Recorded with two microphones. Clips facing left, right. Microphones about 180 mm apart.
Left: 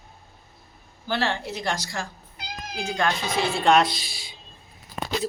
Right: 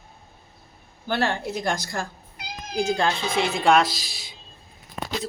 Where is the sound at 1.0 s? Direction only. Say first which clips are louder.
Right 2 dB; 55° right (ahead or behind).